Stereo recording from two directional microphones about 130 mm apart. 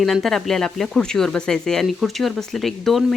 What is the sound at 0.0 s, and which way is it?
Speech, centre (ahead or behind).